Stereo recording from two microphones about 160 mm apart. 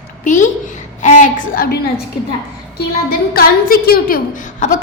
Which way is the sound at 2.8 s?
75° left (ahead or behind).